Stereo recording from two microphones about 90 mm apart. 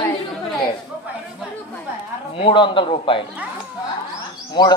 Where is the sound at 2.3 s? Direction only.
70° left (ahead or behind).